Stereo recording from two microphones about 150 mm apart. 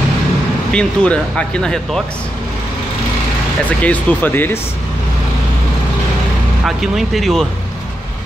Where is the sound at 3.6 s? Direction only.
10° left (ahead or behind).